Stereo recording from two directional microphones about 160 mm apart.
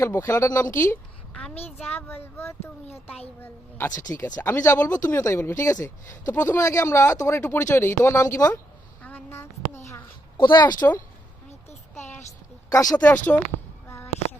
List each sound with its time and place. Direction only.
0.0 s speech: 15° left (ahead or behind)
9.0 s a sound: 15° left (ahead or behind)
10.4 s speech: 25° left (ahead or behind)
11.9 s child singing: 15° left (ahead or behind)
12.7 s speech: 20° left (ahead or behind)
13.8 s a sound: 15° left (ahead or behind)